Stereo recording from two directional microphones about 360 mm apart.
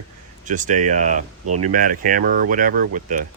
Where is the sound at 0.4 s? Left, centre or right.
Right.